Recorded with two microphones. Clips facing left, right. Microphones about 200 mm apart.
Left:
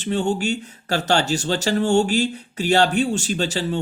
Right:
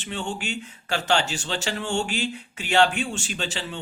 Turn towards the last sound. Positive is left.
turn(degrees=40)  # may be behind; listen again after turning